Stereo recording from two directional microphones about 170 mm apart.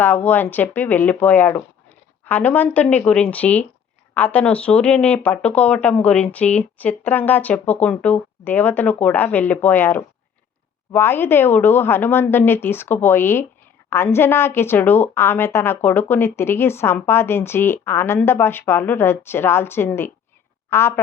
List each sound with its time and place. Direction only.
0.0 s a woman's voice: 10° left (ahead or behind)